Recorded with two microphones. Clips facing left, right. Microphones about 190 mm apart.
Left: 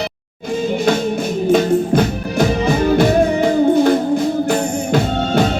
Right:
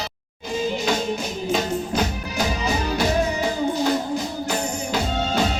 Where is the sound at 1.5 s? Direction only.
55° left (ahead or behind).